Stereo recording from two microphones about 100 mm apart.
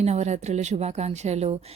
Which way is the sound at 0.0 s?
90° right.